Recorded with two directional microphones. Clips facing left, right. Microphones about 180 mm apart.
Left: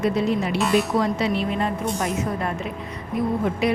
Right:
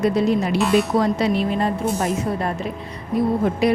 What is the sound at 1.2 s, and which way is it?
Speech, 40° right (ahead or behind).